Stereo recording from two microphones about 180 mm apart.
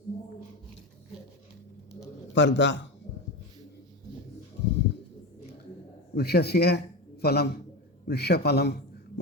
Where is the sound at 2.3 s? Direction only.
90° left.